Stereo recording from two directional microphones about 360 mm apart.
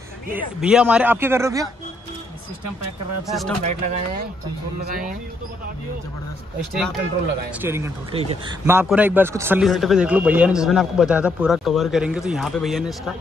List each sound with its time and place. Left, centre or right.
0.6 s speech: centre
3.3 s speech: centre
3.6 s speech: centre
7.6 s speech: centre